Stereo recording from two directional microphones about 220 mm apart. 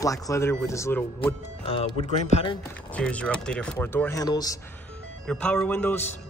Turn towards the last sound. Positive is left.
turn(degrees=10)  # may be behind; listen again after turning